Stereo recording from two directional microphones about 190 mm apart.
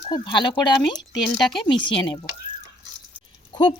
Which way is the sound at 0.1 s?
25° left (ahead or behind).